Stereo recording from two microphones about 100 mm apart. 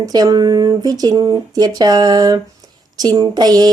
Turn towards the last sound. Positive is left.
turn(degrees=-45)  # may be behind; listen again after turning